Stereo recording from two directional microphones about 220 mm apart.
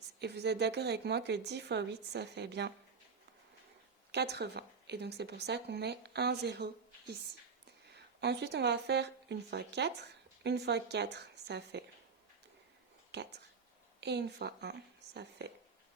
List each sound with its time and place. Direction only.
0.2 s speech: 50° right (ahead or behind)
4.1 s speech: 50° right (ahead or behind)
7.9 s speech: 50° right (ahead or behind)
13.1 s speech: 50° right (ahead or behind)